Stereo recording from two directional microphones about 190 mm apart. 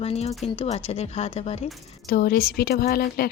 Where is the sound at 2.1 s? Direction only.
50° left (ahead or behind).